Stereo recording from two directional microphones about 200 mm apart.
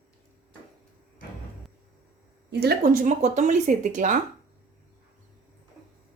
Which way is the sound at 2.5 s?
55° right (ahead or behind).